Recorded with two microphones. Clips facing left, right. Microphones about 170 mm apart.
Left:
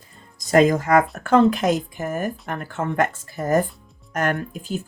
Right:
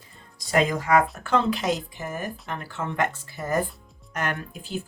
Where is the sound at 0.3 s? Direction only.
45° left (ahead or behind).